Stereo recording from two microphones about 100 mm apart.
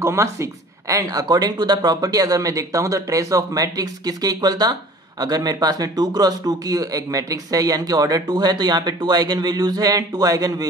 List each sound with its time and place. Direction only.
0.0 s speech: 30° right (ahead or behind)